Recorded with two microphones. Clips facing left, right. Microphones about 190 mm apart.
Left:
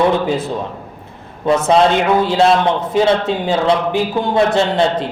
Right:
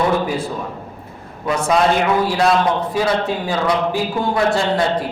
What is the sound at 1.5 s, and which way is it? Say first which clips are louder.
A man's voice: left 4 dB; 25° left (ahead or behind).